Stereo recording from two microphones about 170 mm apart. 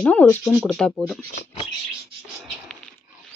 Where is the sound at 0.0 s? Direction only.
10° left (ahead or behind).